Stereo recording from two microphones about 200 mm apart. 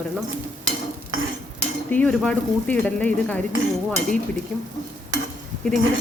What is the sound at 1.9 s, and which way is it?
Speech, 5° left (ahead or behind).